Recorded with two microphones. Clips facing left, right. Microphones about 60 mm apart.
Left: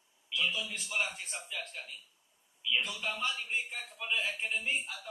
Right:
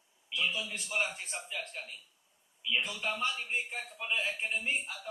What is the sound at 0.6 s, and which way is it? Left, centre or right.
Speech, centre.